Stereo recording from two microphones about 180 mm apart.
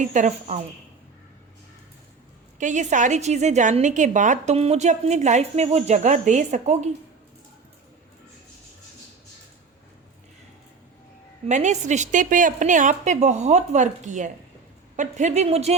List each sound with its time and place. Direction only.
0.0 s speech: 45° right (ahead or behind)
2.6 s a woman's voice: 45° right (ahead or behind)
11.4 s a woman's voice: 40° right (ahead or behind)